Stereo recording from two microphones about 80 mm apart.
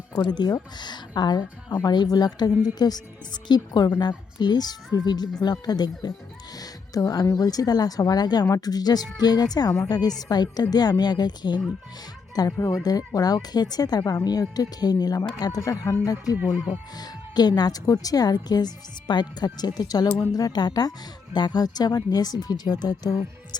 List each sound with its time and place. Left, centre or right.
0.2 s speech: left
12.5 s speech: left
12.8 s speech: left
16.4 s speech: centre
17.0 s speech: left